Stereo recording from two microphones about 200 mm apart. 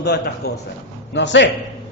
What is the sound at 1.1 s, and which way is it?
Speech, 65° left (ahead or behind).